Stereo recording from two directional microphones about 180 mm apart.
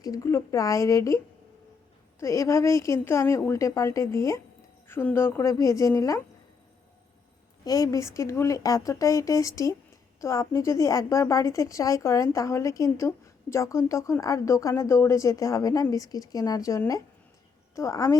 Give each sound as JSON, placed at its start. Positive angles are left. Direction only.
{"t": 0.0, "sound": "a woman's voice", "side_deg": 20}
{"t": 7.6, "sound": "a woman's voice", "side_deg": 20}